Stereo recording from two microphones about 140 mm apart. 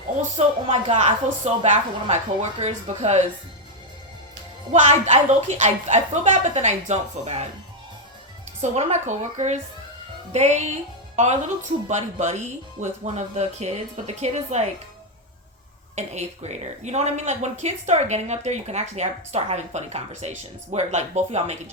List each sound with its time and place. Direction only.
0.2 s a woman's voice: 45° right (ahead or behind)
4.7 s a woman's voice: 55° right (ahead or behind)
8.6 s a woman's voice: 55° right (ahead or behind)
11.9 s a woman's voice: 55° right (ahead or behind)
16.0 s a woman's voice: 55° right (ahead or behind)